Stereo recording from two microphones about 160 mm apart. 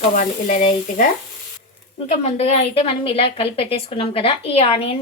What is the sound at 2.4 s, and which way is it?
A woman's voice, 40° left (ahead or behind).